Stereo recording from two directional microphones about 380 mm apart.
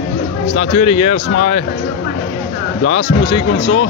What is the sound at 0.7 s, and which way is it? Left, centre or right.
Speech, centre.